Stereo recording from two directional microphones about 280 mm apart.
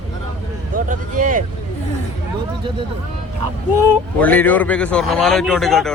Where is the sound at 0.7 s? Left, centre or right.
Right.